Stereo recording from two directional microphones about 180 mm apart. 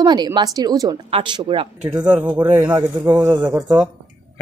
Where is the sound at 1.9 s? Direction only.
5° right (ahead or behind).